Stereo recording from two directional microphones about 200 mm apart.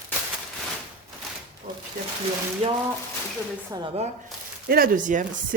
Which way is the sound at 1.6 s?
35° right (ahead or behind).